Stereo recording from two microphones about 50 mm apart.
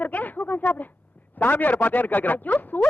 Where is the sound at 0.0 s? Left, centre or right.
Left.